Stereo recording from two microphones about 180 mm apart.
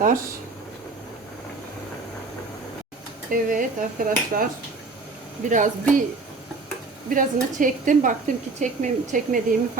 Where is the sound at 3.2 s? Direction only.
50° right (ahead or behind).